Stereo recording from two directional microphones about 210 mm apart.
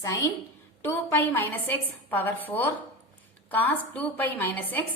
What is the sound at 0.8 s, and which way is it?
A woman's voice, 10° left (ahead or behind).